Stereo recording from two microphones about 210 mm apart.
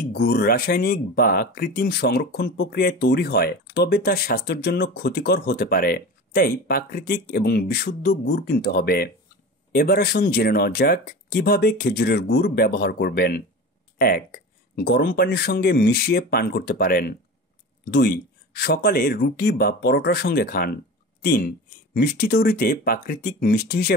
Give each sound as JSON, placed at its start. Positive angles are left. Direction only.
{"t": 0.0, "sound": "speech", "side_deg": 50}